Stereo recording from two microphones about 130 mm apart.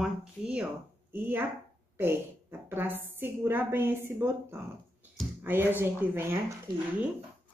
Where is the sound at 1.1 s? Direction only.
15° right (ahead or behind).